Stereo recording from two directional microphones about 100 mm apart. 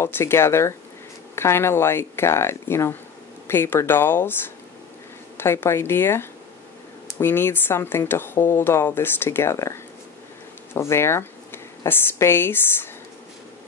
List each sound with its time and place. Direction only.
0.0 s speech: 25° left (ahead or behind)
5.4 s speech: 25° left (ahead or behind)